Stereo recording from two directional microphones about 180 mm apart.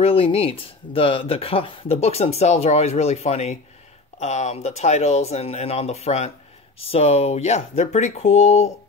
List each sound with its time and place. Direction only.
0.0 s speech: 30° left (ahead or behind)